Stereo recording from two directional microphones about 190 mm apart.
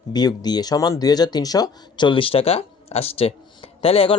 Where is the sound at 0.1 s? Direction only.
20° left (ahead or behind).